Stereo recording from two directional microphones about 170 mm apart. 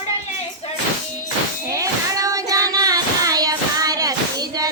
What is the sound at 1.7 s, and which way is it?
Child singing, 20° right (ahead or behind).